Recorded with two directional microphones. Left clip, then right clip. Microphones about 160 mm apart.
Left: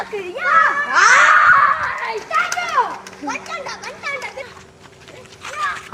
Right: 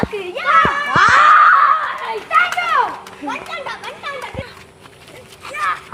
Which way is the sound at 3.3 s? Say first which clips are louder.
Right 1 dB; 10° left (ahead or behind).